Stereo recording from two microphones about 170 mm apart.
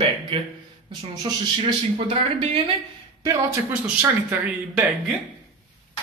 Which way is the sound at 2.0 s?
40° right (ahead or behind).